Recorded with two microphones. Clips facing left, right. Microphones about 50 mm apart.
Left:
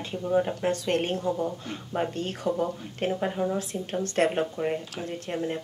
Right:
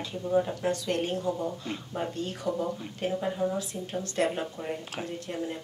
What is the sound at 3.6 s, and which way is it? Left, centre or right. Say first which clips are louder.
Speech: left 3 dB; left.